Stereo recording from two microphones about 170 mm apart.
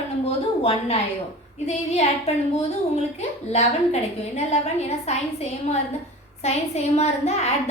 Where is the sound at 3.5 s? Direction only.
40° left (ahead or behind).